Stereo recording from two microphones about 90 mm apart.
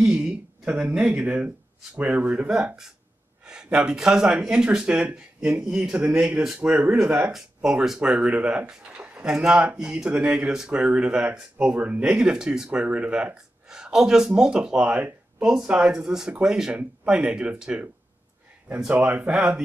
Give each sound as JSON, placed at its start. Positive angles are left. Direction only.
{"t": 0.0, "sound": "speech", "side_deg": -10}
{"t": 7.3, "sound": "speech", "side_deg": -5}
{"t": 18.9, "sound": "speech", "side_deg": -15}